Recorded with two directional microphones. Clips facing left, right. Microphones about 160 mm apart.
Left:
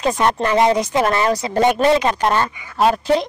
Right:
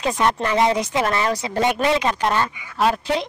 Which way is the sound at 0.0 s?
45° left (ahead or behind).